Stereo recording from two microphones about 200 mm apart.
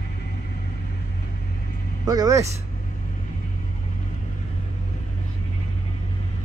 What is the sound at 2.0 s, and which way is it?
Speech, 20° right (ahead or behind).